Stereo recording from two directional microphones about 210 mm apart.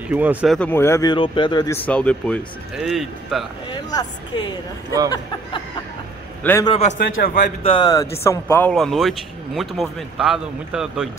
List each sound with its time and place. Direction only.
0.1 s speech: 5° right (ahead or behind)
0.6 s speech: 10° left (ahead or behind)
1.9 s speech: 5° left (ahead or behind)
3.6 s speech: 20° left (ahead or behind)
6.4 s speech: 10° left (ahead or behind)
6.9 s a man's voice: 45° left (ahead or behind)
7.6 s speech: 20° left (ahead or behind); by 11.1 s 5° right (ahead or behind)